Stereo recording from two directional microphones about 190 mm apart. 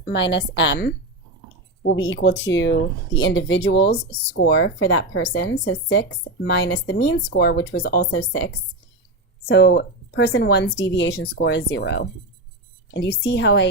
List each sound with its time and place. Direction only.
0.1 s speech: 70° left (ahead or behind)
6.9 s speech: 65° left (ahead or behind)
9.5 s a woman's voice: 60° left (ahead or behind)